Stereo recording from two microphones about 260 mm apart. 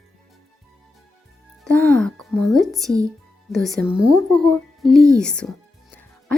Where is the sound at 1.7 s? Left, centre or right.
Centre.